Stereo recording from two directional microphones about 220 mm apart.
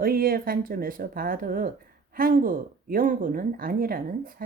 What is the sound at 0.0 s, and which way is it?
Speech, 40° right (ahead or behind).